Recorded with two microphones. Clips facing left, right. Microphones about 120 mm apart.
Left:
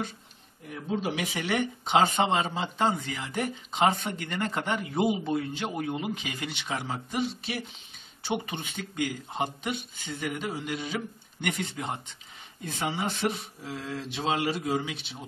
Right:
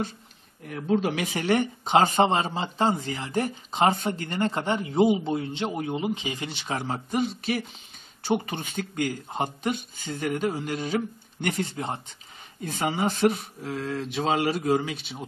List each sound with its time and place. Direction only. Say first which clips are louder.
0.7 s speech: right 6 dB; 60° right (ahead or behind)
1.3 s speech: right 5 dB; 45° right (ahead or behind)
12.6 s speech: right 5 dB; 45° right (ahead or behind)